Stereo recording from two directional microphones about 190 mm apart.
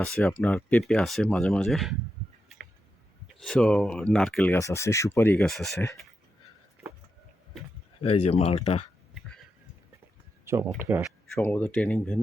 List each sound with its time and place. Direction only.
0.0 s speech: 5° left (ahead or behind)
3.4 s speech: 5° left (ahead or behind)
8.0 s speech: 30° left (ahead or behind)
10.8 s speech: 15° right (ahead or behind)
11.3 s speech: 10° left (ahead or behind)